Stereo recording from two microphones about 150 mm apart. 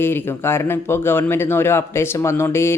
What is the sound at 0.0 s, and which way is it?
Speech, 15° left (ahead or behind).